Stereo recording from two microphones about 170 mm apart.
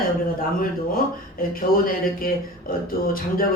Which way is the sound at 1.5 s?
60° left (ahead or behind).